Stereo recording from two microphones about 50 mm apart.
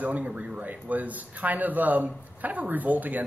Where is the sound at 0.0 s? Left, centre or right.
Right.